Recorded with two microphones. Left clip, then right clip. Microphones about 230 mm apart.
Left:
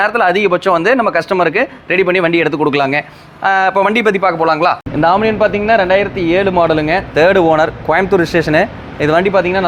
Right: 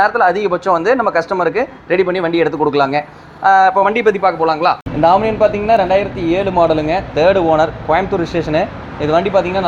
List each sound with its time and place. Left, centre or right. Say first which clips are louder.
0.0 s a man's voice: left 1 dB; left